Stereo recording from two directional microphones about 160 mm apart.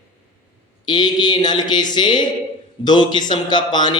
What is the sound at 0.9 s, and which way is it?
A man's voice, 25° left (ahead or behind).